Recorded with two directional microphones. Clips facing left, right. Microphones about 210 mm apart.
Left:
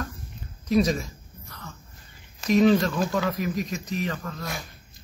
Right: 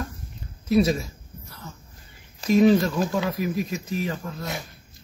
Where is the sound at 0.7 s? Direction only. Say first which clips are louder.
Right 2 dB; 5° right (ahead or behind).